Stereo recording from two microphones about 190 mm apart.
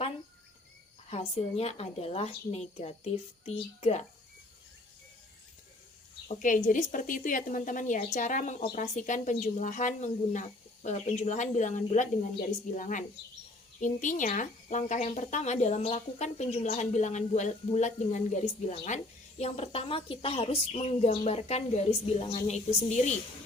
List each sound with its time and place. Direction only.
1.1 s speech: 35° left (ahead or behind)
6.2 s a woman's voice: 45° left (ahead or behind)